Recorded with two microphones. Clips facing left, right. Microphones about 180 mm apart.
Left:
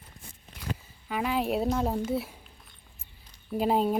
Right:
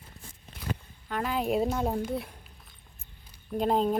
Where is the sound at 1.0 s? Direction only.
5° left (ahead or behind).